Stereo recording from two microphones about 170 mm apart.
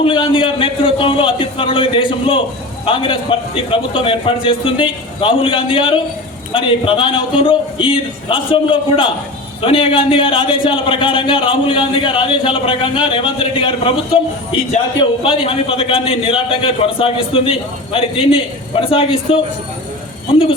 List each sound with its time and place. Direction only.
0.0 s a man's voice: 30° left (ahead or behind)